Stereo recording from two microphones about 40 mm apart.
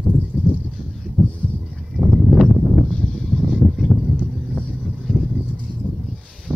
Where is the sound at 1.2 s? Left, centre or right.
Right.